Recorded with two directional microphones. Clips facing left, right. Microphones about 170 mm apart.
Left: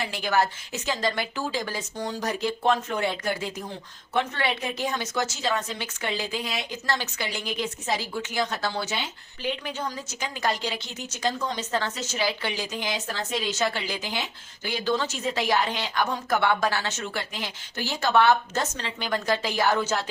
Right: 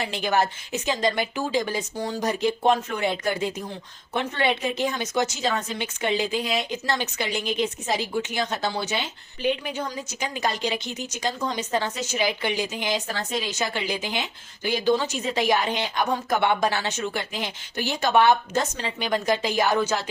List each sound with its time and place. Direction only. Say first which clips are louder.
0.1 s a woman's voice: right 1 dB; 20° right (ahead or behind)